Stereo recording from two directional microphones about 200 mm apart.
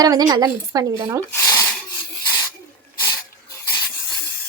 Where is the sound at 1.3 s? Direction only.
15° left (ahead or behind).